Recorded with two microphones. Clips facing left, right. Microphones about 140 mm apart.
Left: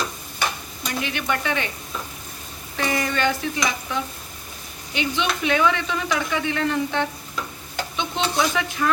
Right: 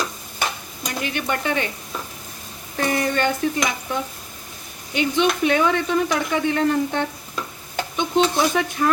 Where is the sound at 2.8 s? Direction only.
45° right (ahead or behind).